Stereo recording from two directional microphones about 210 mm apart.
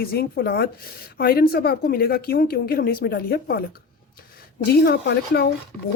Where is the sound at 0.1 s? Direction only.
50° left (ahead or behind).